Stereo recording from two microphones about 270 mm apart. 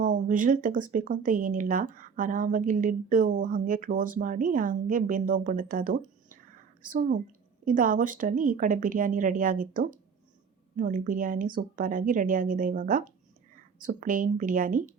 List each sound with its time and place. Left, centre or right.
0.0 s speech: right